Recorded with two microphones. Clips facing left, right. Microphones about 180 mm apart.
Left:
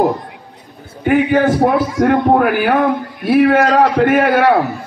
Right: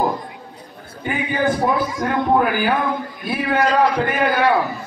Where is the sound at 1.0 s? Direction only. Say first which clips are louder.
Left 8 dB; 65° left (ahead or behind).